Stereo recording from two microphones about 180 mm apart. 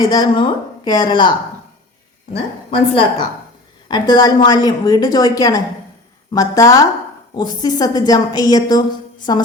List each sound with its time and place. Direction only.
0.0 s a woman's voice: 25° left (ahead or behind)
2.6 s a woman's voice: 30° left (ahead or behind)